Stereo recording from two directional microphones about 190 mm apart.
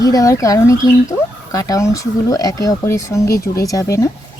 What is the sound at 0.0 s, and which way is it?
Speech, 20° left (ahead or behind).